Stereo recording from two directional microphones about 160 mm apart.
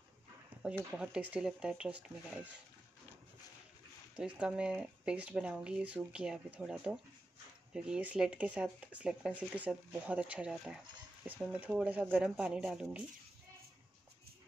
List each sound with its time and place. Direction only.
0.9 s speech: 10° right (ahead or behind)
4.2 s speech: 5° right (ahead or behind)